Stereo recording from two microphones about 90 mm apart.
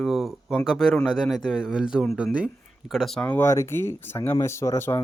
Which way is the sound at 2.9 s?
Centre (ahead or behind).